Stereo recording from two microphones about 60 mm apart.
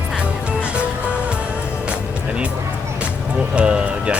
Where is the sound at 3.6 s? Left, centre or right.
Centre.